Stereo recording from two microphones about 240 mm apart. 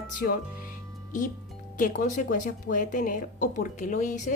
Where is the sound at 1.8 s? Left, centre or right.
Left.